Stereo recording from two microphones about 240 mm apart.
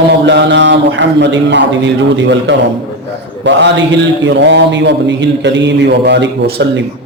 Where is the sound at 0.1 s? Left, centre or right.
Right.